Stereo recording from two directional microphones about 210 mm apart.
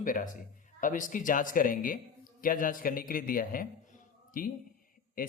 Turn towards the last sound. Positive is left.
turn(degrees=40)  # may be behind; listen again after turning